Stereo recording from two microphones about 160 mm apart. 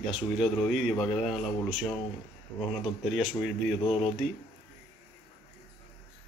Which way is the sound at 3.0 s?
Centre (ahead or behind).